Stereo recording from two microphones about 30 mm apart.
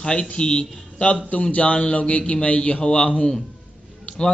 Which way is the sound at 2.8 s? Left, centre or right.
Left.